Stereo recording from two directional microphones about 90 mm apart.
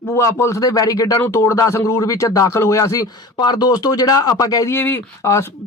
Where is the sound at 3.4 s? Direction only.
50° left (ahead or behind).